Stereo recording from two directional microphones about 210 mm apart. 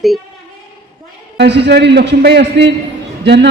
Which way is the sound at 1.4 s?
55° right (ahead or behind).